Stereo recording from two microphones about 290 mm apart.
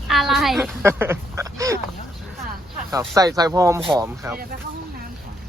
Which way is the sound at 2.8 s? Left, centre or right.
Centre.